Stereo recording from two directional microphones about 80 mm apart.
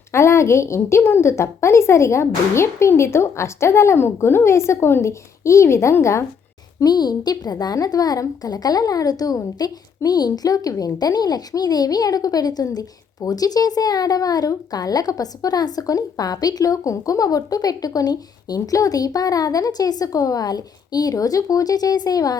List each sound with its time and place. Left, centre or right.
0.1 s a woman's voice: left
6.7 s speech: left